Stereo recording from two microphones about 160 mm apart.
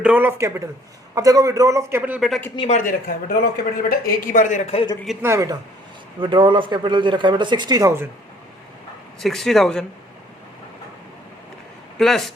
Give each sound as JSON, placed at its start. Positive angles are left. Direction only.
{"t": 0.0, "sound": "speech", "side_deg": -10}
{"t": 2.6, "sound": "speech", "side_deg": 50}
{"t": 3.4, "sound": "speech", "side_deg": 65}
{"t": 5.2, "sound": "speech", "side_deg": -20}
{"t": 6.1, "sound": "speech", "side_deg": -30}
{"t": 9.2, "sound": "speech", "side_deg": 0}
{"t": 11.9, "sound": "speech", "side_deg": 0}